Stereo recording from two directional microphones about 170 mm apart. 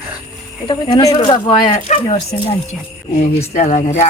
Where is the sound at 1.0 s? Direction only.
20° left (ahead or behind).